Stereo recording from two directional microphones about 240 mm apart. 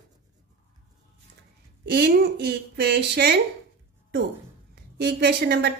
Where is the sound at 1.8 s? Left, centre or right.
Right.